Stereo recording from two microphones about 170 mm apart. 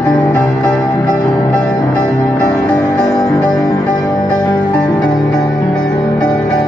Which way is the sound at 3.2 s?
25° left (ahead or behind).